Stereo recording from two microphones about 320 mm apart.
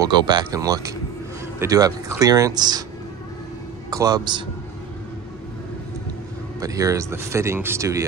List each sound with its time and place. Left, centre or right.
0.0 s speech: centre
3.9 s speech: centre
6.6 s speech: centre